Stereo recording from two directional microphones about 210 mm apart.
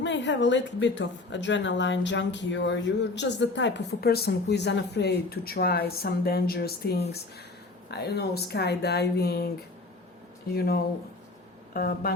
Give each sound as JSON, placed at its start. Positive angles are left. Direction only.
{"t": 0.0, "sound": "speech", "side_deg": 60}
{"t": 10.5, "sound": "speech", "side_deg": 50}